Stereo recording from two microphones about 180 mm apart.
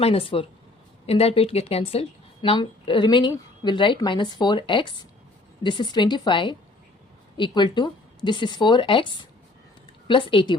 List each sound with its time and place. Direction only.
0.0 s a woman's voice: 30° left (ahead or behind)
10.1 s a woman's voice: 30° left (ahead or behind)